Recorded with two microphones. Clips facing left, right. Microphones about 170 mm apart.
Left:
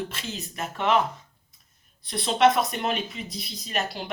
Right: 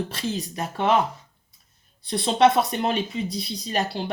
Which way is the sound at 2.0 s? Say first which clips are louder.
Right 2 dB; 30° right (ahead or behind).